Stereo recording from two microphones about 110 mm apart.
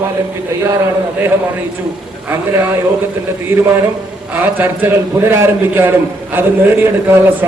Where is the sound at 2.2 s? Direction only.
15° right (ahead or behind).